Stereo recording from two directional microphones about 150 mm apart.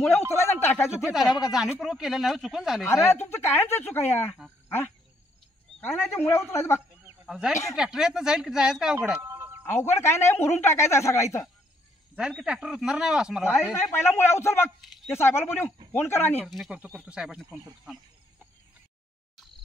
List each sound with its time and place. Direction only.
0.3 s a sound: 15° left (ahead or behind)
1.1 s speech: centre (ahead or behind)
2.9 s speech: 15° left (ahead or behind)
5.8 s speech: 15° left (ahead or behind)
7.2 s speech: 5° right (ahead or behind)
9.3 s a sound: 15° right (ahead or behind)
9.6 s speech: 15° left (ahead or behind)
12.2 s speech: 5° right (ahead or behind)
13.8 s speech: 15° left (ahead or behind)
16.4 s speech: centre (ahead or behind)